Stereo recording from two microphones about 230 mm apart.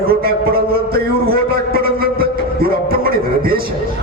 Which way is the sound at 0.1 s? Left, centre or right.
Right.